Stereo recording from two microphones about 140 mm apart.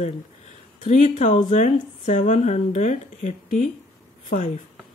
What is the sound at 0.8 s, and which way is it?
A woman's voice, 60° left (ahead or behind).